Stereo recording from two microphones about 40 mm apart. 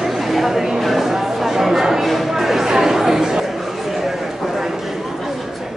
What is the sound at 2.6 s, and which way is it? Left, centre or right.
Chatter, centre.